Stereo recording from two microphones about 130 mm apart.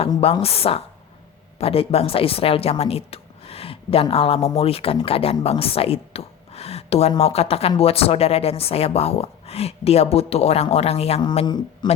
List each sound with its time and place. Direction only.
0.4 s speech: 50° left (ahead or behind)
11.4 s speech: 35° left (ahead or behind)